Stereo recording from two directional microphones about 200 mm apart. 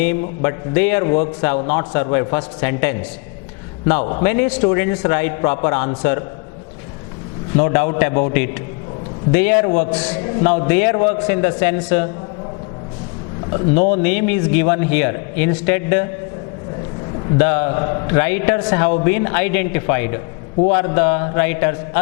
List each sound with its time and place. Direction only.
0.0 s a man's voice: 15° left (ahead or behind)
4.2 s a man's voice: 15° left (ahead or behind)
7.5 s a man's voice: 15° left (ahead or behind)
13.9 s a man's voice: 10° left (ahead or behind)
17.3 s a man's voice: 15° left (ahead or behind)